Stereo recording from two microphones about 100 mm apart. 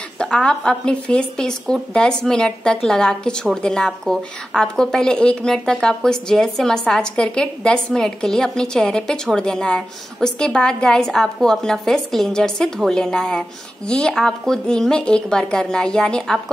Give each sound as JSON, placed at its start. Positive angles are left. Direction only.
{"t": 0.2, "sound": "a woman's voice", "side_deg": 5}